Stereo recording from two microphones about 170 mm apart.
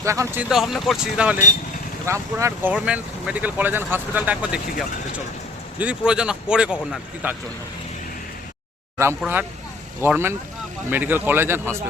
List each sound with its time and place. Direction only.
0.0 s speech: 15° right (ahead or behind)
0.4 s speech: centre (ahead or behind)
2.0 s speech: 15° right (ahead or behind)
5.8 s speech: 5° right (ahead or behind)
9.0 s speech: 15° right (ahead or behind)